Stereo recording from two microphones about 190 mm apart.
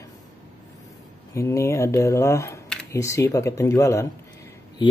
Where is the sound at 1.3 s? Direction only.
15° left (ahead or behind).